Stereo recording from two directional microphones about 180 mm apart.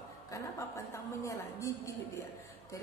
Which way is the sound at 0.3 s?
15° left (ahead or behind).